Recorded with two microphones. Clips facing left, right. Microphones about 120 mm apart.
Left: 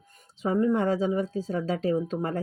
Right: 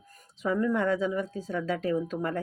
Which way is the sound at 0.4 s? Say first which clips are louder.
Left 2 dB; 30° left (ahead or behind).